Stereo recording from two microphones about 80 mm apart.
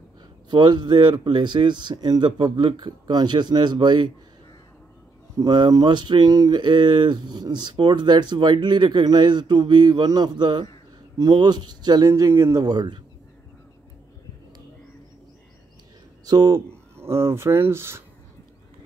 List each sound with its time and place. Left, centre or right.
0.5 s speech: right
5.3 s speech: right
5.6 s speech: right
11.1 s speech: right
12.1 s speech: right
12.6 s speech: right
16.3 s a man's voice: right
16.9 s speech: right